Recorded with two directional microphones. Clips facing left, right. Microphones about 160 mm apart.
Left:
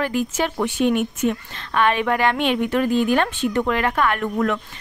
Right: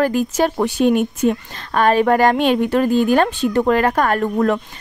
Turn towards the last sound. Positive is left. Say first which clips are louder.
# right 5 dB
turn(degrees=-35)  # may be behind; listen again after turning